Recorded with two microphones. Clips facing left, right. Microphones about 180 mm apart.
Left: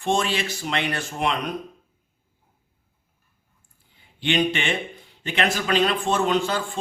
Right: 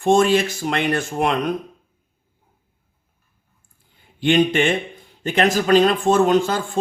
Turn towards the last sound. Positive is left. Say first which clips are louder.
# right 5 dB
turn(degrees=-45)  # may be behind; listen again after turning